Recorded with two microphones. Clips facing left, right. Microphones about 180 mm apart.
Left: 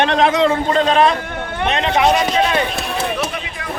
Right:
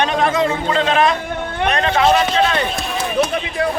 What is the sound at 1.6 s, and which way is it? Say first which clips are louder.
Speech: even; 20° left (ahead or behind).